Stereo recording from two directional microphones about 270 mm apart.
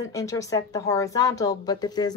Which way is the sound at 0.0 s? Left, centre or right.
Centre.